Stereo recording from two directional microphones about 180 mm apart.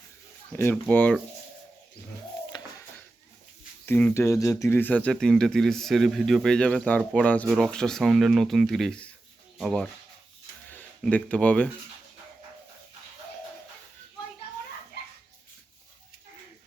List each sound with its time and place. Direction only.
0.5 s speech: 10° left (ahead or behind)
2.5 s a sound: 25° left (ahead or behind)
3.8 s speech: 10° left (ahead or behind)